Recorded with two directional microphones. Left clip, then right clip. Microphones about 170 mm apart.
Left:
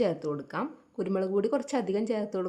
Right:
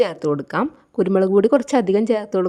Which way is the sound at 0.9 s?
50° right (ahead or behind).